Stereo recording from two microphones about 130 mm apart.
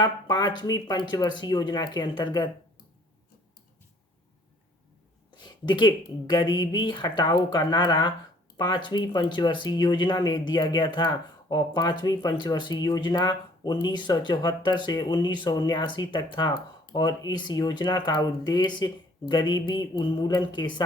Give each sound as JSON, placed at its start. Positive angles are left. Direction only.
{"t": 0.0, "sound": "speech", "side_deg": 35}
{"t": 5.4, "sound": "speech", "side_deg": 35}